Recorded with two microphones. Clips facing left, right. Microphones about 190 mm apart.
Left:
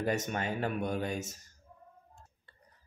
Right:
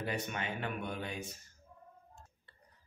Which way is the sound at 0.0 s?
45° left (ahead or behind).